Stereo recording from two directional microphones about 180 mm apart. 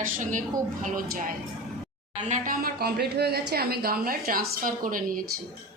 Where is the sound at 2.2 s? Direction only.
45° right (ahead or behind).